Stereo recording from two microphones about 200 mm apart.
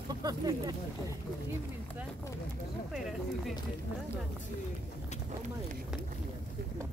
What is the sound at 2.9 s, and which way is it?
Speech, centre (ahead or behind).